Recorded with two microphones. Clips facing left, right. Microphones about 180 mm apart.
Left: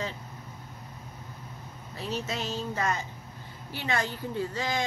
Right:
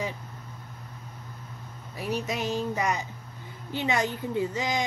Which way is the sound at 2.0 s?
15° right (ahead or behind).